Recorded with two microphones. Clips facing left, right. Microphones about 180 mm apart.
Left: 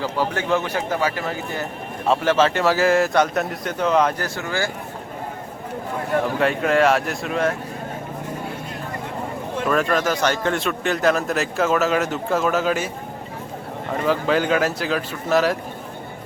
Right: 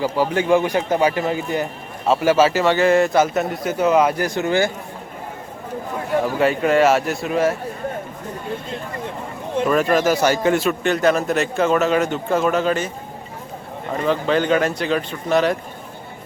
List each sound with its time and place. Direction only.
0.0 s a man's voice: 10° right (ahead or behind)
4.4 s speech: 20° right (ahead or behind)
6.4 s a man's voice: centre (ahead or behind)
9.9 s a man's voice: 10° right (ahead or behind)
13.9 s a man's voice: 5° left (ahead or behind)